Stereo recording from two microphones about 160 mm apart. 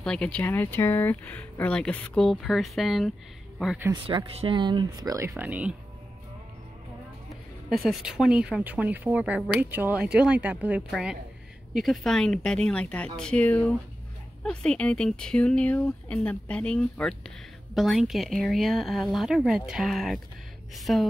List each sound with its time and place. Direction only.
0.0 s speech: 5° left (ahead or behind)
3.9 s speech: 30° right (ahead or behind)
5.3 s speech: 10° right (ahead or behind)
7.7 s speech: centre (ahead or behind)